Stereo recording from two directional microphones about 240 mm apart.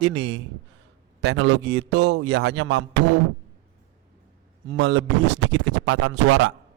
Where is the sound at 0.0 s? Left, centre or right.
Right.